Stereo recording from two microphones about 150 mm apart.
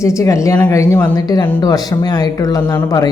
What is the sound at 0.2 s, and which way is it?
Speech, 20° left (ahead or behind).